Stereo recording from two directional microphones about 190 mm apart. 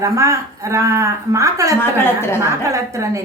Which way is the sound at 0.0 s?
15° right (ahead or behind).